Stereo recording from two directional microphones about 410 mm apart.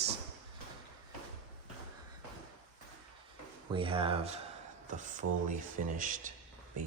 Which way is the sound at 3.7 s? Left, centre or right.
Centre.